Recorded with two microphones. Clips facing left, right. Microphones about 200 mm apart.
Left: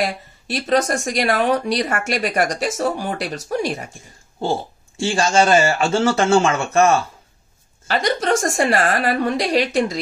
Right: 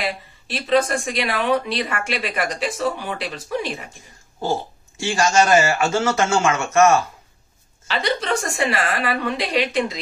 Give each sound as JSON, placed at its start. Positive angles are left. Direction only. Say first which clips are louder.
{"t": 0.0, "sound": "speech", "louder": "left 4 dB", "side_deg": 45}
{"t": 4.9, "sound": "speech", "louder": "left 1 dB", "side_deg": 30}
{"t": 7.9, "sound": "speech", "louder": "left 4 dB", "side_deg": 45}